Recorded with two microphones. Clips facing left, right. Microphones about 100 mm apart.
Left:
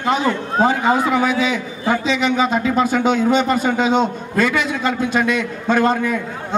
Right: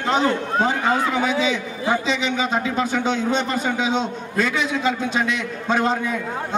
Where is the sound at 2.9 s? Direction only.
75° left (ahead or behind).